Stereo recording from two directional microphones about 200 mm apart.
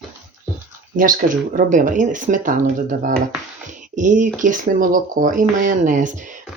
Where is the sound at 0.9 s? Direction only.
45° right (ahead or behind).